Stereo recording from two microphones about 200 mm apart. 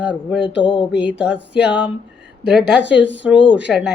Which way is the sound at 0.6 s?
25° left (ahead or behind).